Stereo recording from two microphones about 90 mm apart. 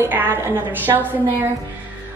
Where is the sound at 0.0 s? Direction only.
20° right (ahead or behind).